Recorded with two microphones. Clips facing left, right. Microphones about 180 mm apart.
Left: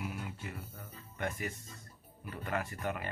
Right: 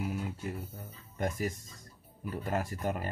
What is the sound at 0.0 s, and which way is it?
Speech, 40° right (ahead or behind).